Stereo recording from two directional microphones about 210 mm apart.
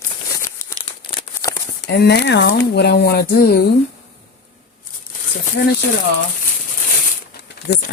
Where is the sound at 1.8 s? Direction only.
55° left (ahead or behind).